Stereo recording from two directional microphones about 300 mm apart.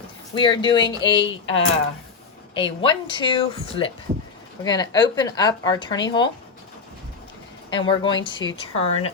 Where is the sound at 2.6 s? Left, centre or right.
Centre.